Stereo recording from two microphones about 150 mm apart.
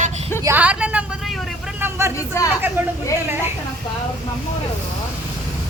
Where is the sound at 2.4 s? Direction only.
20° left (ahead or behind).